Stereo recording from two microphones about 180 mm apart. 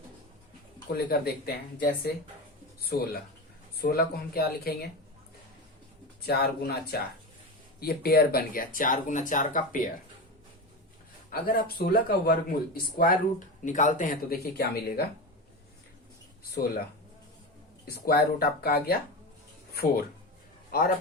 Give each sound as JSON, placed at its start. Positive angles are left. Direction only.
{"t": 0.9, "sound": "speech", "side_deg": 60}
{"t": 6.2, "sound": "speech", "side_deg": 60}
{"t": 11.3, "sound": "speech", "side_deg": 55}
{"t": 17.8, "sound": "a man's voice", "side_deg": 55}